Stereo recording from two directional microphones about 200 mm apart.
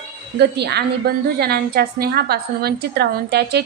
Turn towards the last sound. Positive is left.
turn(degrees=-55)  # may be behind; listen again after turning